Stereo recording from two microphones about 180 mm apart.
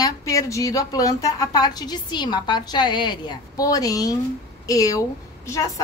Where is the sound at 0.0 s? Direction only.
20° left (ahead or behind).